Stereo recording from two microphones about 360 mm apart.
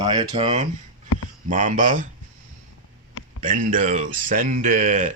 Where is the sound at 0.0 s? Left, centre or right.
Centre.